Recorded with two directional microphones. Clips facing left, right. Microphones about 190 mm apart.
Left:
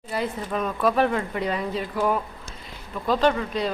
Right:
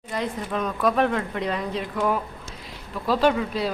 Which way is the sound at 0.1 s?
5° left (ahead or behind).